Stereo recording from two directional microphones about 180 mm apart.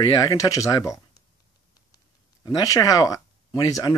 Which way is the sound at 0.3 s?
20° left (ahead or behind).